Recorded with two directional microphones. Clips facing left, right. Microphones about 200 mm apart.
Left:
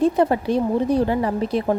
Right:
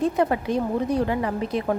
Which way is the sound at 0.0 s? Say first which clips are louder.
Left 4 dB; 30° left (ahead or behind).